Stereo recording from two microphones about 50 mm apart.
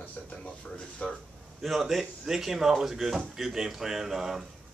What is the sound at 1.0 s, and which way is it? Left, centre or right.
Speech, left.